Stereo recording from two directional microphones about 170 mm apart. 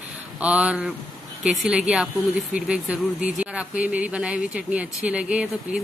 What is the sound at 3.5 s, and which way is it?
A woman's voice, 10° right (ahead or behind).